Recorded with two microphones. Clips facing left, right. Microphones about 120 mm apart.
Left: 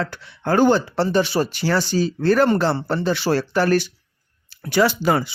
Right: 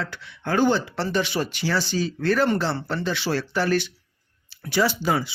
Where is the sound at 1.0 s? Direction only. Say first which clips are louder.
Left 5 dB; 35° left (ahead or behind).